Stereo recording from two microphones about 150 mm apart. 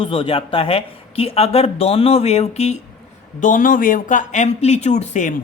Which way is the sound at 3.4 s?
60° left (ahead or behind).